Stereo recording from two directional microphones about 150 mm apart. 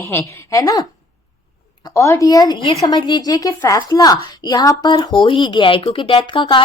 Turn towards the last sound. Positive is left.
turn(degrees=30)  # may be behind; listen again after turning